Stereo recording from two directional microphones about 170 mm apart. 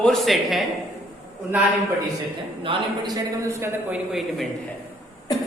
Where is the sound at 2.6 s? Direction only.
25° right (ahead or behind); by 4.4 s 5° right (ahead or behind).